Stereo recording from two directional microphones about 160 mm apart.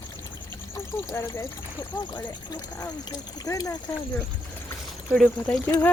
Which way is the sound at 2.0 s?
25° left (ahead or behind).